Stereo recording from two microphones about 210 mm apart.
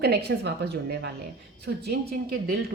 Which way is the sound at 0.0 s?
50° right (ahead or behind).